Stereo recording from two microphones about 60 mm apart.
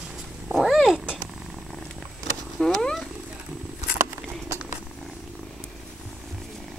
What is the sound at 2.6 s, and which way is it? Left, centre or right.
Cat, centre.